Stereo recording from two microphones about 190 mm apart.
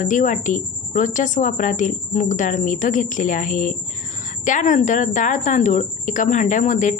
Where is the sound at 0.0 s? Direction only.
45° left (ahead or behind).